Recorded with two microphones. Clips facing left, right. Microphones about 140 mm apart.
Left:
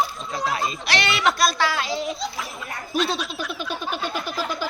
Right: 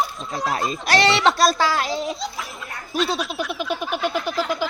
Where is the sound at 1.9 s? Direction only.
Centre (ahead or behind).